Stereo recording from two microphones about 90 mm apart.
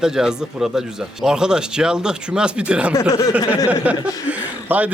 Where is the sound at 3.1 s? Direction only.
45° left (ahead or behind).